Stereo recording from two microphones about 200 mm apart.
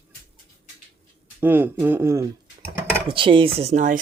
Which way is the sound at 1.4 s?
10° right (ahead or behind).